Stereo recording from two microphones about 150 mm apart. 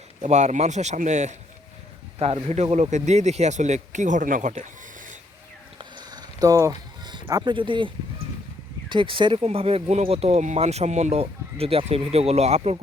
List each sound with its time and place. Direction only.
0.2 s speech: 50° right (ahead or behind)
6.0 s a sound: 25° right (ahead or behind)
8.9 s speech: 35° right (ahead or behind)